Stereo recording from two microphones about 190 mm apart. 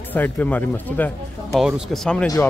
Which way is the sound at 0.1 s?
10° left (ahead or behind).